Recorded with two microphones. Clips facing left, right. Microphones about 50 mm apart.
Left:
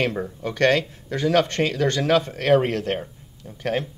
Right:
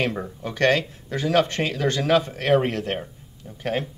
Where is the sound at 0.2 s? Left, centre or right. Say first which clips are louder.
Left 1 dB; centre.